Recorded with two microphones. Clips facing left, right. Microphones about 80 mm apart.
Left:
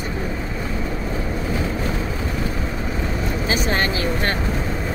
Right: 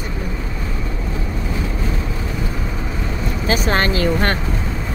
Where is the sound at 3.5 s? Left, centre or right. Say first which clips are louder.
Right 4 dB; right.